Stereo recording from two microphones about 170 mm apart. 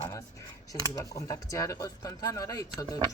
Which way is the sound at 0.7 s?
20° left (ahead or behind).